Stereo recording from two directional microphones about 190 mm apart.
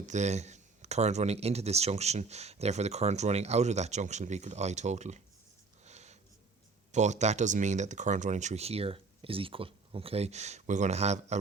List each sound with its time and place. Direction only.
0.0 s speech: 40° right (ahead or behind)
5.8 s a sound: 35° right (ahead or behind)
6.9 s speech: 40° right (ahead or behind)